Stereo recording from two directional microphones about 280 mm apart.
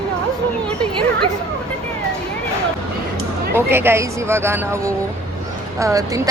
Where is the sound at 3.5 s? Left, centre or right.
Centre.